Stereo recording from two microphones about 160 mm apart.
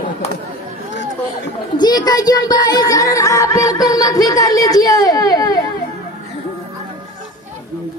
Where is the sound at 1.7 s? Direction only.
25° left (ahead or behind).